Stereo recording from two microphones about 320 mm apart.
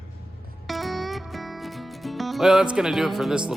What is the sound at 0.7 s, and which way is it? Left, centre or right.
Music, centre.